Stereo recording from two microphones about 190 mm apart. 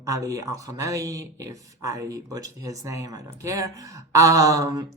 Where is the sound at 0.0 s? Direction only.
15° right (ahead or behind).